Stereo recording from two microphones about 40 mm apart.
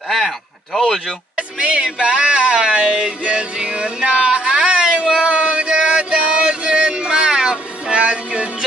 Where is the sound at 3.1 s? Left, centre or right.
Right.